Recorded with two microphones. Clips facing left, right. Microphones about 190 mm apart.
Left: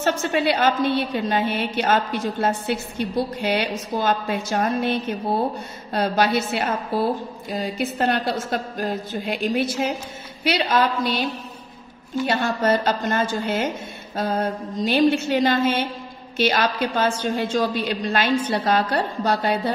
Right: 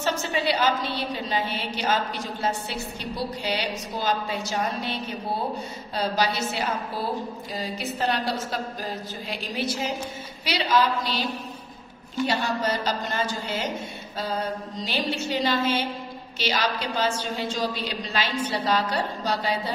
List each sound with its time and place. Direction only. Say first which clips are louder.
0.0 s a woman's voice: left 5 dB; 55° left (ahead or behind)
5.9 s a woman's voice: left 5 dB; 55° left (ahead or behind)
12.3 s a woman's voice: left 7 dB; 50° left (ahead or behind)